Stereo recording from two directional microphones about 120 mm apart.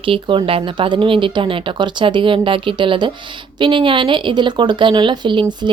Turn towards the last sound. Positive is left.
turn(degrees=-40)  # may be behind; listen again after turning